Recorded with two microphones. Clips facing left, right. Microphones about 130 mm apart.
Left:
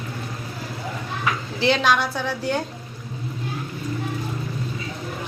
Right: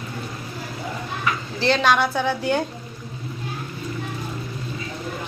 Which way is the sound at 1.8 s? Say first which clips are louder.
Right 2 dB; centre (ahead or behind).